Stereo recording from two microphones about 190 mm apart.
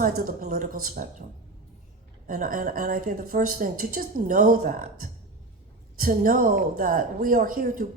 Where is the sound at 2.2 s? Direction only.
45° right (ahead or behind).